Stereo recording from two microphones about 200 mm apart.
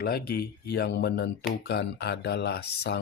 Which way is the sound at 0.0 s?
50° left (ahead or behind).